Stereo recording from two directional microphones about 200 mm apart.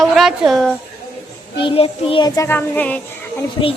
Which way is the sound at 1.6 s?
25° left (ahead or behind).